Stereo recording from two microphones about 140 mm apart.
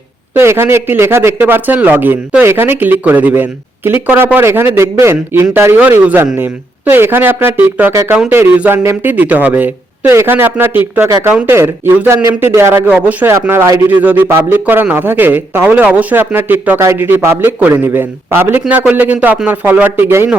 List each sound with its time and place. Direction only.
0.3 s a man's voice: 15° right (ahead or behind)